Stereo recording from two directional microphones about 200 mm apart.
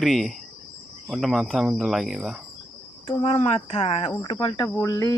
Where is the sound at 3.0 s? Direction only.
25° left (ahead or behind).